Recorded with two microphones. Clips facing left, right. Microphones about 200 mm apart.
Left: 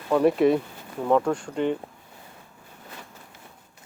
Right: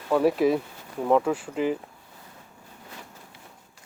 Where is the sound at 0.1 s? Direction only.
Centre (ahead or behind).